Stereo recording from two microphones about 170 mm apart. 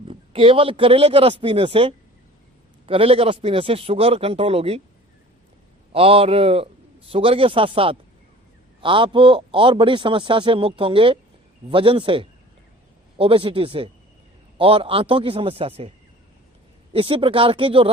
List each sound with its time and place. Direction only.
0.0 s a man's voice: 30° right (ahead or behind)
5.9 s a man's voice: 35° right (ahead or behind)
16.9 s a man's voice: 30° right (ahead or behind)